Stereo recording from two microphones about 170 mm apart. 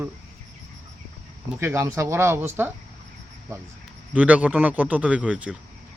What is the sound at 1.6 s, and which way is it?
Speech, 15° right (ahead or behind).